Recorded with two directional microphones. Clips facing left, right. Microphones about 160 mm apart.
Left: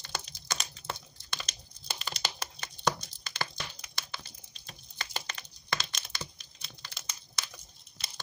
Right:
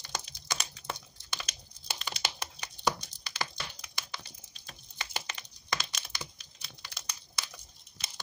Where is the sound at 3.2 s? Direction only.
15° right (ahead or behind).